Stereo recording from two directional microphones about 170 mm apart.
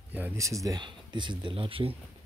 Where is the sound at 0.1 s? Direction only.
15° right (ahead or behind); by 2.0 s 30° right (ahead or behind).